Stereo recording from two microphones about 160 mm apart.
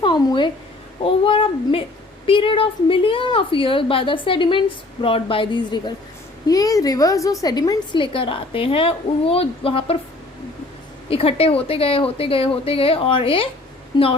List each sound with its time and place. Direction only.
0.0 s a sound: 30° left (ahead or behind)
1.0 s child singing: 35° left (ahead or behind)
2.2 s a woman's voice: 35° left (ahead or behind)
11.1 s a woman's voice: 35° left (ahead or behind)